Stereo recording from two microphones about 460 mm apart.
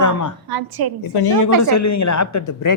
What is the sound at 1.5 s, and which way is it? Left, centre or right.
Speech, right.